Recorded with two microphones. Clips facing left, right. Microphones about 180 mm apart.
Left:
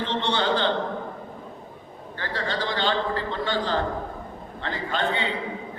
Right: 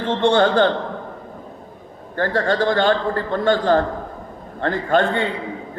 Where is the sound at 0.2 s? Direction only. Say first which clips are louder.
Right 10 dB; 50° right (ahead or behind).